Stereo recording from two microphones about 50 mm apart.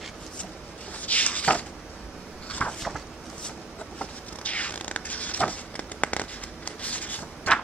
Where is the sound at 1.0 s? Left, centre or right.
Left.